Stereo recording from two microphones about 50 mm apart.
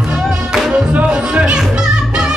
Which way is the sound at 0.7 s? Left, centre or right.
Right.